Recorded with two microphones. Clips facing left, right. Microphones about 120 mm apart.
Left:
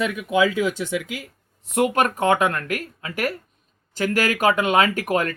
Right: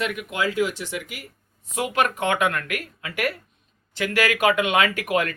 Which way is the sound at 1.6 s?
55° left (ahead or behind).